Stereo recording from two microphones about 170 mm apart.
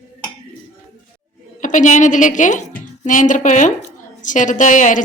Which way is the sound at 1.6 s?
45° left (ahead or behind).